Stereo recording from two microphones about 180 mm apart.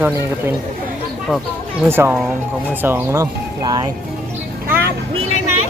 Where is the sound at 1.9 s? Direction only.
15° right (ahead or behind).